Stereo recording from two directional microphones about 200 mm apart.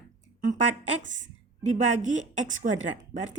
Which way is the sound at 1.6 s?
35° right (ahead or behind).